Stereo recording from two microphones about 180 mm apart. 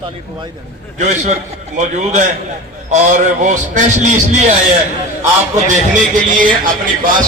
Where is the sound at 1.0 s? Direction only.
40° right (ahead or behind).